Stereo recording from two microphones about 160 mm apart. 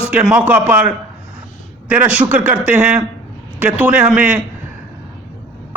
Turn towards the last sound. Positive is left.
turn(degrees=-5)  # may be behind; listen again after turning